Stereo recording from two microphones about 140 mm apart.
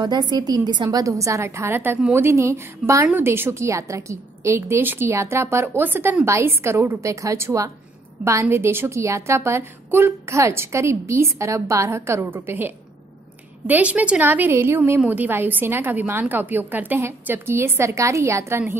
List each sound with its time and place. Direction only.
0.0 s a woman's voice: 30° right (ahead or behind)